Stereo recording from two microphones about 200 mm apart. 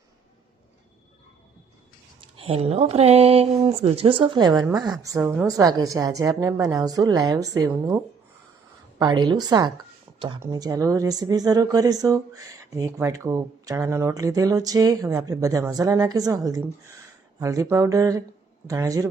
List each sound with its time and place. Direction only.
2.3 s speech: 30° right (ahead or behind)
10.1 s a sound: 15° right (ahead or behind)
10.4 s speech: 20° right (ahead or behind)